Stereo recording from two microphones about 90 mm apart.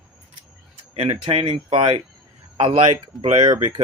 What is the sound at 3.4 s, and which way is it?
Speech, 60° right (ahead or behind).